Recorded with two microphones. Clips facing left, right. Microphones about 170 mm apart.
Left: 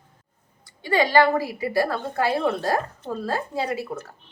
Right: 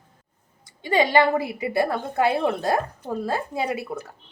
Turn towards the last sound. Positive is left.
turn(degrees=-15)  # may be behind; listen again after turning